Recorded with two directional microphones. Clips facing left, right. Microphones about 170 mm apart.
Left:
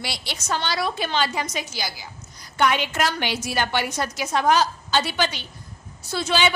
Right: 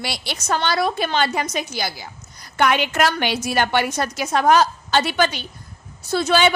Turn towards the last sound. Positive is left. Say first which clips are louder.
# right 5 dB
turn(degrees=-50)  # may be behind; listen again after turning